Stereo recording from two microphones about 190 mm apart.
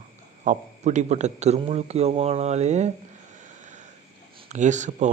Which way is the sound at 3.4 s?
40° right (ahead or behind).